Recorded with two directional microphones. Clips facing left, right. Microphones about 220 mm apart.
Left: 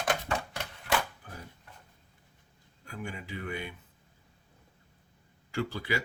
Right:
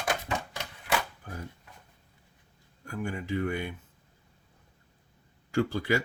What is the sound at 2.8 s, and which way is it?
Speech, 50° right (ahead or behind).